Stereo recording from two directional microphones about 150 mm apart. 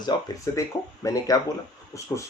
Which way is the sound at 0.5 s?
20° left (ahead or behind).